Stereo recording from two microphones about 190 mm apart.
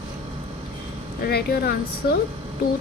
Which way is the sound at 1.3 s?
55° left (ahead or behind).